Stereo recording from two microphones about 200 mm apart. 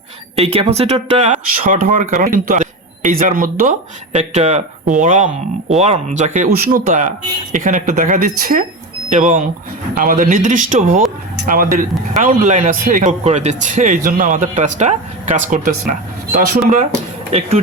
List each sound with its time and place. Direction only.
0.3 s speech: 30° right (ahead or behind)
4.1 s speech: 30° right (ahead or behind)